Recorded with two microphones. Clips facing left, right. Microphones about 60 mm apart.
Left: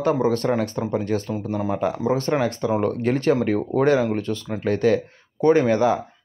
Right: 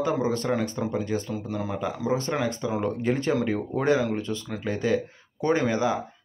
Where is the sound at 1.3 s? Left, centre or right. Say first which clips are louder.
Left 5 dB; left.